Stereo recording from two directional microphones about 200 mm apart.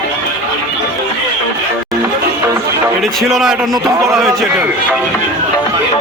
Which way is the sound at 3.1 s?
Centre (ahead or behind).